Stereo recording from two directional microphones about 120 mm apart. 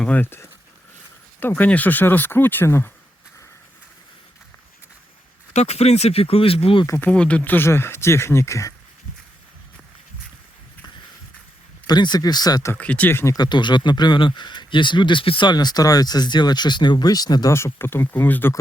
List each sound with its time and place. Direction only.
0.0 s speech: 15° left (ahead or behind)
5.5 s speech: 60° left (ahead or behind)
6.8 s speech: 20° left (ahead or behind)
7.1 s speech: 10° left (ahead or behind); by 8.7 s 25° left (ahead or behind)
11.9 s speech: 35° left (ahead or behind)
12.7 s speech: 10° left (ahead or behind)
13.3 s speech: 35° left (ahead or behind)
17.5 s speech: 20° left (ahead or behind)